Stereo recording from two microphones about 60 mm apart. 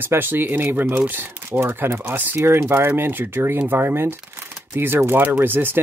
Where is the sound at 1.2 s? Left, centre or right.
Right.